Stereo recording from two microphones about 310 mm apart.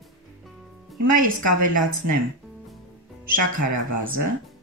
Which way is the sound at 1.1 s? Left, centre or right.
Right.